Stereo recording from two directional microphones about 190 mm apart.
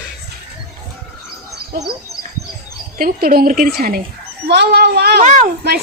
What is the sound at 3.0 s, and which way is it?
A woman's voice, 50° right (ahead or behind).